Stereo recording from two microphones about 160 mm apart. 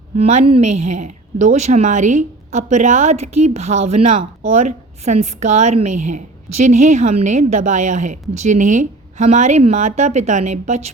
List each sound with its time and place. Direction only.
0.2 s a woman's voice: 45° right (ahead or behind)